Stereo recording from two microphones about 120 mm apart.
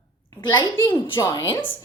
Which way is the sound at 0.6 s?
25° left (ahead or behind).